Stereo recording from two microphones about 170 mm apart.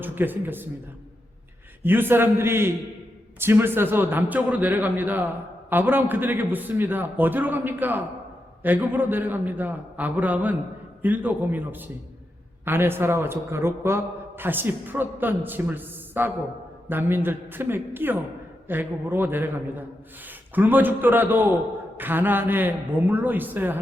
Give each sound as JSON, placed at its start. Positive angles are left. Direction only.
{"t": 0.0, "sound": "a man's voice", "side_deg": -10}
{"t": 1.8, "sound": "a man's voice", "side_deg": -10}